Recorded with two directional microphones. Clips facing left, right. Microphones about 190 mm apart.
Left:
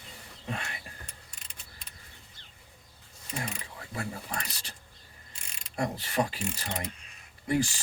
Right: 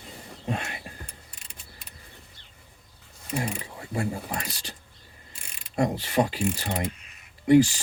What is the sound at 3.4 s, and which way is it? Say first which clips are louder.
Speech: right 6 dB; 30° right (ahead or behind).